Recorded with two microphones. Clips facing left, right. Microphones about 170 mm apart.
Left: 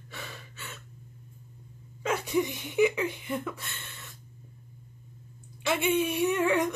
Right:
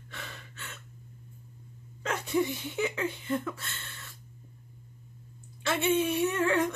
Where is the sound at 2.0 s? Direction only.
10° left (ahead or behind).